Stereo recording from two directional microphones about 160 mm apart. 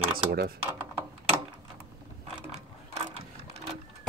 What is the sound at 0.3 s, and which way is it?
Speech, 75° right (ahead or behind).